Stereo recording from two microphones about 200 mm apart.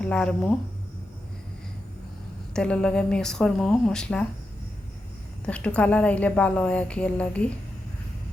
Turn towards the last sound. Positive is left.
turn(degrees=5)  # may be behind; listen again after turning